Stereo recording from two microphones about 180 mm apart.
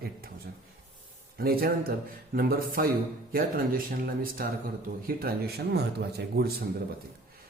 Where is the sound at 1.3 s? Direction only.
55° right (ahead or behind).